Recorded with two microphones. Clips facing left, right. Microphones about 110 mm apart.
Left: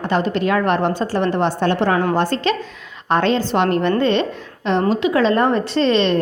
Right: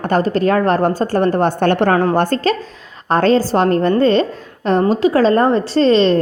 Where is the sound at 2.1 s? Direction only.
45° right (ahead or behind).